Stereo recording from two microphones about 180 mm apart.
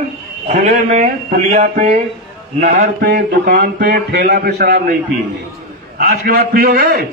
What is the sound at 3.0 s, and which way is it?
A man's voice, 60° right (ahead or behind).